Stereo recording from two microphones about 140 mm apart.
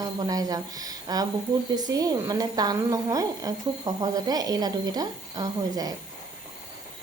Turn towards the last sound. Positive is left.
turn(degrees=-25)  # may be behind; listen again after turning